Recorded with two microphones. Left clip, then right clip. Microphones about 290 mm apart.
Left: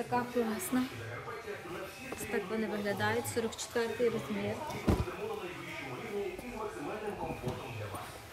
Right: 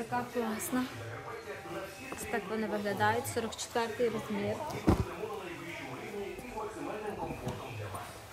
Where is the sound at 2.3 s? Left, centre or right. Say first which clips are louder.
Right 1 dB; centre.